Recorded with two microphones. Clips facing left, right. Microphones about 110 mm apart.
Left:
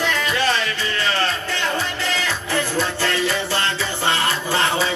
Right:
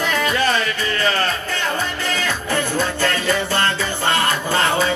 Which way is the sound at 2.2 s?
50° right (ahead or behind).